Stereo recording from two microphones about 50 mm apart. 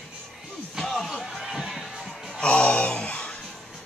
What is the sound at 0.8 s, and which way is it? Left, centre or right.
Slam, centre.